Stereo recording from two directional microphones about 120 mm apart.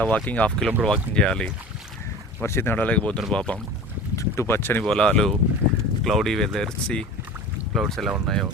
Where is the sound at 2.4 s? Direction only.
20° left (ahead or behind).